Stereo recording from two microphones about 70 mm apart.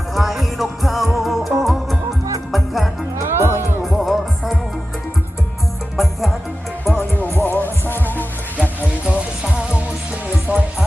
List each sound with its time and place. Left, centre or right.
0.1 s music: centre
3.3 s music: right
3.8 s music: centre
6.0 s music: centre
6.9 s music: left
9.0 s music: centre